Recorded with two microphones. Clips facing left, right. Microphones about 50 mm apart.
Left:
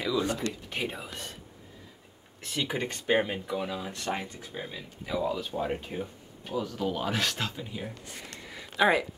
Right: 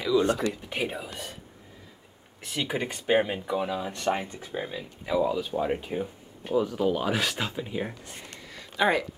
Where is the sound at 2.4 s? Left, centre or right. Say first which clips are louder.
Right 1 dB; centre.